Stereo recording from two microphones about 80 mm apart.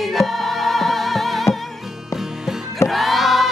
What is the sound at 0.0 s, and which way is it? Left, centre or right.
Music, centre.